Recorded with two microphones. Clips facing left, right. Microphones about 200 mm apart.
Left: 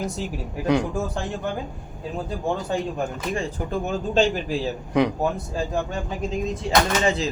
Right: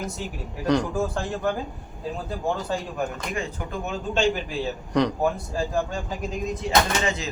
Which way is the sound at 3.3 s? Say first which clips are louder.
Left 4 dB; 35° left (ahead or behind).